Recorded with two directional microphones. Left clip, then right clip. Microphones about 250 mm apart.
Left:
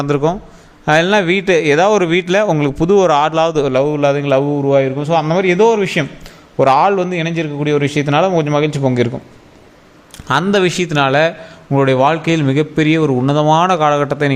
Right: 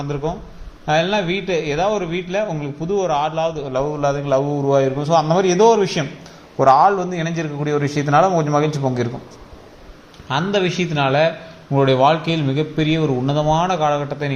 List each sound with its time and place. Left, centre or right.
0.0 s a man's voice: left
10.2 s a man's voice: left